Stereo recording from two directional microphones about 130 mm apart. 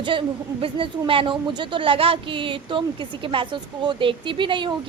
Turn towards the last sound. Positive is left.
turn(degrees=-40)  # may be behind; listen again after turning